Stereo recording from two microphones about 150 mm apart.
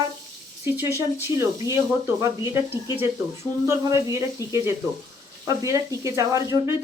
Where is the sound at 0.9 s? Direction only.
20° right (ahead or behind).